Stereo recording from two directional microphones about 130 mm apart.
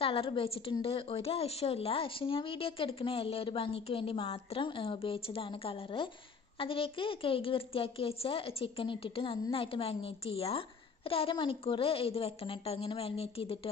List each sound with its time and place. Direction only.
0.0 s a woman's voice: 45° left (ahead or behind)